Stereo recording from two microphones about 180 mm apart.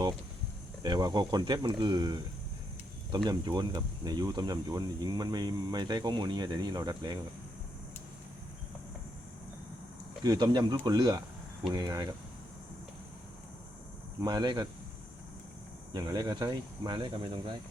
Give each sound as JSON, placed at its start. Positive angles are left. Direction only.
{"t": 0.8, "sound": "speech", "side_deg": -20}
{"t": 3.2, "sound": "speech", "side_deg": -20}
{"t": 10.2, "sound": "speech", "side_deg": -20}
{"t": 14.2, "sound": "speech", "side_deg": -25}
{"t": 15.9, "sound": "speech", "side_deg": -25}